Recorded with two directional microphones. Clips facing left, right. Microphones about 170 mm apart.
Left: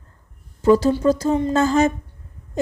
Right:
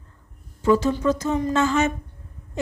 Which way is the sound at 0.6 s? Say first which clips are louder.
Left 4 dB; 35° left (ahead or behind).